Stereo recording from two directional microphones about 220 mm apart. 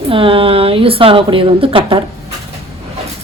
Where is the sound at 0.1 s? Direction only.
25° right (ahead or behind).